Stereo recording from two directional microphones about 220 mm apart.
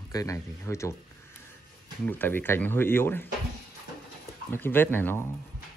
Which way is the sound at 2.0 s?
10° left (ahead or behind).